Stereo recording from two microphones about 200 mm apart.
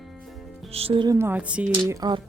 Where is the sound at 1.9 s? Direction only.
20° right (ahead or behind).